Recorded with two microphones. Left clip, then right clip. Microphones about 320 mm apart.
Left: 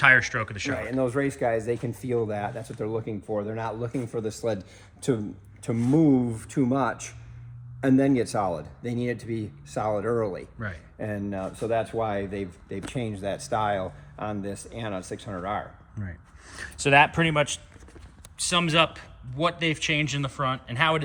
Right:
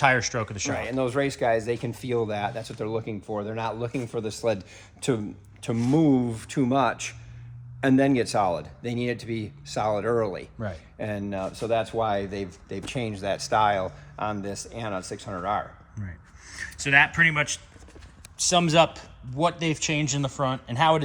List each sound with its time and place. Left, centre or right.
0.0 s a man's voice: centre
0.9 s speech: centre
18.3 s a man's voice: centre